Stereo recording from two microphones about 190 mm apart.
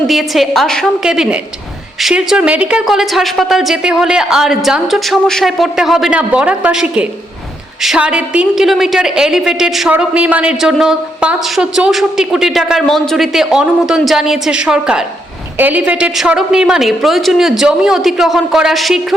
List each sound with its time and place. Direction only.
0.1 s a woman's voice: centre (ahead or behind)